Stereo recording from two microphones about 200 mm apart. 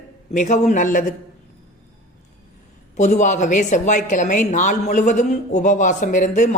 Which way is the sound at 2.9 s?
35° left (ahead or behind).